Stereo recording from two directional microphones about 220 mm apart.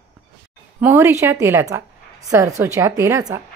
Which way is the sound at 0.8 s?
10° right (ahead or behind).